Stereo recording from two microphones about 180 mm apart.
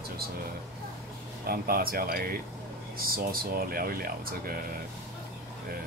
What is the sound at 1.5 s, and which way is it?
Speech, 55° right (ahead or behind).